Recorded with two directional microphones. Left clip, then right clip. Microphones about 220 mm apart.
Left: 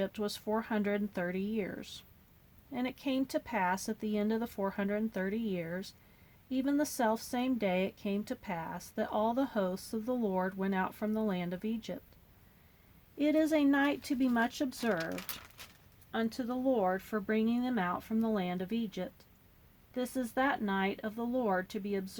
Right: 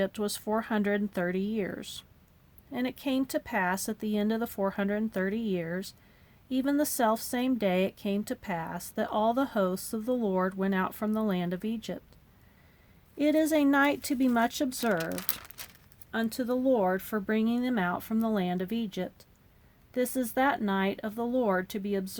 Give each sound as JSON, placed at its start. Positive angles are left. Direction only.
{"t": 0.0, "sound": "a woman's voice", "side_deg": -35}
{"t": 13.1, "sound": "a woman's voice", "side_deg": -40}